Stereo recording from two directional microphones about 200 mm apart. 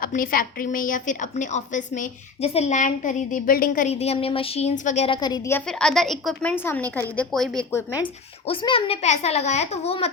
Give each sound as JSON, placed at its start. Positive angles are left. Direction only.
{"t": 0.0, "sound": "a woman's voice", "side_deg": 45}
{"t": 8.4, "sound": "a woman's voice", "side_deg": 25}